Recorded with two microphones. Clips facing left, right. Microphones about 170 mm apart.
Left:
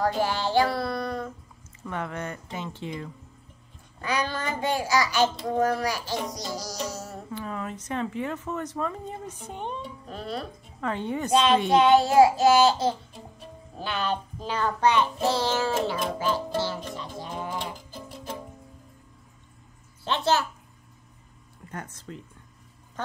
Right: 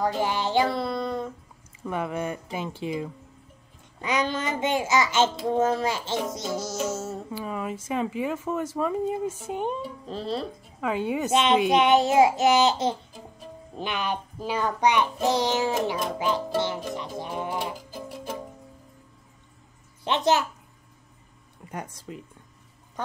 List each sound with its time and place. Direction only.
0.2 s child singing: 20° right (ahead or behind)
4.0 s a child's voice: 20° right (ahead or behind)
7.3 s child singing: 10° right (ahead or behind)
10.0 s a child's voice: 30° right (ahead or behind)
10.8 s child singing: 5° right (ahead or behind)
11.2 s a child's voice: 20° right (ahead or behind)
13.7 s child singing: 15° right (ahead or behind)
16.5 s a child's voice: 20° right (ahead or behind)
17.2 s music: 15° right (ahead or behind)
20.1 s child singing: 15° right (ahead or behind)
21.6 s child singing: 10° right (ahead or behind)